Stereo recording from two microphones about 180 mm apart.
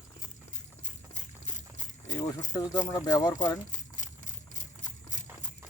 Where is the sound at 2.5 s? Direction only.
20° left (ahead or behind).